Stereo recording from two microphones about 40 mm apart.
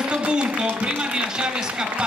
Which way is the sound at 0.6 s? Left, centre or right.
Right.